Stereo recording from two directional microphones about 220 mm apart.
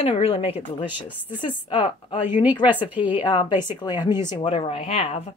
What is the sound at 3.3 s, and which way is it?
Speech, 20° left (ahead or behind).